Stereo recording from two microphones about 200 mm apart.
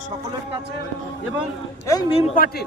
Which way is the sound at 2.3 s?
50° left (ahead or behind).